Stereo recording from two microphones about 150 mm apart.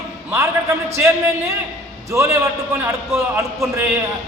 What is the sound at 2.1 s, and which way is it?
Speech, 20° right (ahead or behind).